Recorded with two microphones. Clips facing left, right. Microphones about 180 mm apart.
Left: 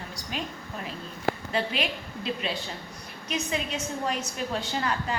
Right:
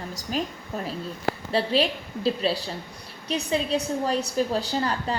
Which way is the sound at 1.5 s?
35° right (ahead or behind).